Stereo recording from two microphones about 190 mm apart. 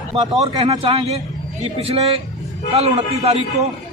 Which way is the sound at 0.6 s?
25° right (ahead or behind).